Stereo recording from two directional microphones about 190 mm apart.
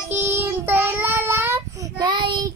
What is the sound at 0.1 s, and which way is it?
Child singing, 10° right (ahead or behind).